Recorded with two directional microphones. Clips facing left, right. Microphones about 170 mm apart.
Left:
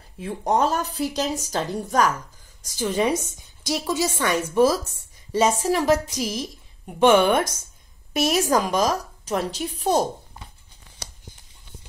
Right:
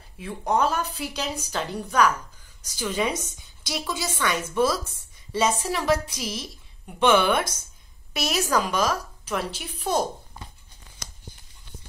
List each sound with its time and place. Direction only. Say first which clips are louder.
0.5 s a woman's voice: left 2 dB; 40° left (ahead or behind)